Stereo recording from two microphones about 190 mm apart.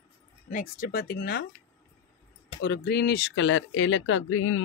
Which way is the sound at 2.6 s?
60° left (ahead or behind).